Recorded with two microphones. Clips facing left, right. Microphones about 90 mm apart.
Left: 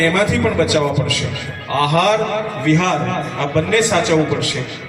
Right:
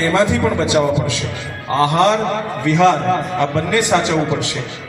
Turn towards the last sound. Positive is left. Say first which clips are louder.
# left 2 dB
turn(degrees=-20)  # may be behind; listen again after turning